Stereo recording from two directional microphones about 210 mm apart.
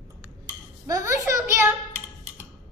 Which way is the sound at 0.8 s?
15° right (ahead or behind).